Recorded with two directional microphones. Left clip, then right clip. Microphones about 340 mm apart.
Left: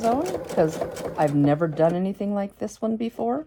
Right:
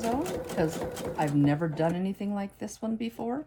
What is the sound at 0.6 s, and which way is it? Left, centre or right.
Speech, centre.